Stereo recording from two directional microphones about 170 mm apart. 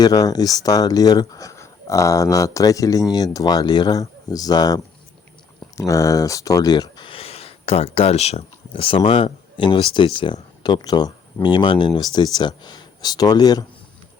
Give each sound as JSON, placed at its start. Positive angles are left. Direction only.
{"t": 0.0, "sound": "speech", "side_deg": 20}